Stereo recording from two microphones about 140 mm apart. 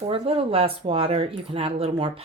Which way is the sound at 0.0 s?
40° right (ahead or behind).